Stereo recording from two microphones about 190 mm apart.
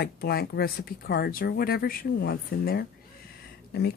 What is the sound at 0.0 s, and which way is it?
Speech, 55° left (ahead or behind).